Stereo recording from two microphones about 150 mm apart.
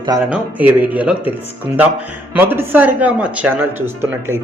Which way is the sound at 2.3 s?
15° right (ahead or behind).